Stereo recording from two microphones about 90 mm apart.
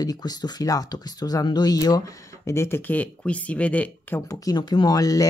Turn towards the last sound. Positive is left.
turn(degrees=40)  # may be behind; listen again after turning